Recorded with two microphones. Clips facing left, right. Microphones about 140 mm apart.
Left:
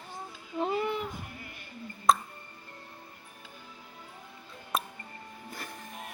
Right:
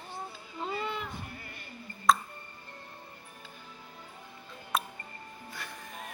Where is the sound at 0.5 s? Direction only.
60° left (ahead or behind).